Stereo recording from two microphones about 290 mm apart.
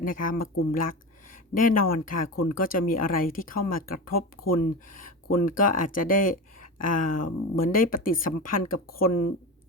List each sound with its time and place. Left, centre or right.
0.0 s speech: left
4.1 s speech: left
4.5 s speech: left